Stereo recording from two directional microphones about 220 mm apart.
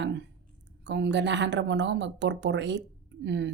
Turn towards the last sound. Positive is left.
turn(degrees=-50)  # may be behind; listen again after turning